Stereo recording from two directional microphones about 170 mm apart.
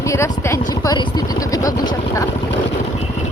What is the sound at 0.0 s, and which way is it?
Speech, 15° left (ahead or behind).